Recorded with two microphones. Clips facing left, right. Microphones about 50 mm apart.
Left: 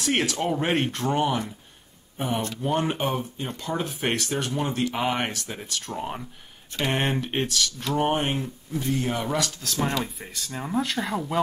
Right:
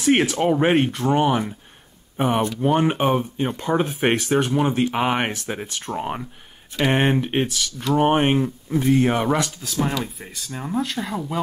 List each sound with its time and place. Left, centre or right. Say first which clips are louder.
0.0 s speech: right 7 dB; centre
0.7 s speech: right 5 dB; centre
1.1 s speech: right 6 dB; right
2.1 s speech: right 7 dB; right
2.6 s speech: right 6 dB; right
8.1 s speech: right 7 dB; right
9.6 s speech: right 2 dB; centre